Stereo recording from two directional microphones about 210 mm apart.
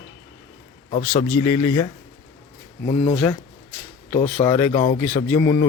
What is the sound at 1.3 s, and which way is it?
Speech, 10° left (ahead or behind).